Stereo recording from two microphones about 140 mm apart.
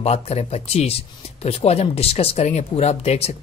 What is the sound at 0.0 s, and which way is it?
Speech, 50° left (ahead or behind).